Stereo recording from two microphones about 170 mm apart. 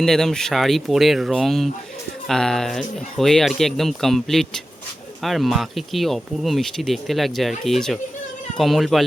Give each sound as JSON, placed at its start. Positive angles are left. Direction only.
{"t": 0.0, "sound": "speech", "side_deg": 5}